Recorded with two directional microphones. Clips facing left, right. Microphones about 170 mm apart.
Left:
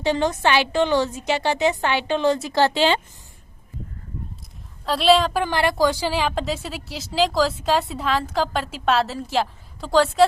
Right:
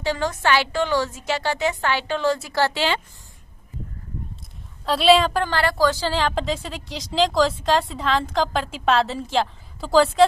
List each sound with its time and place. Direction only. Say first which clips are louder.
0.0 s a woman's voice: left 3 dB; 20° left (ahead or behind)
4.9 s a woman's voice: right 1 dB; centre (ahead or behind)
5.4 s a woman's voice: left 1 dB; 15° left (ahead or behind)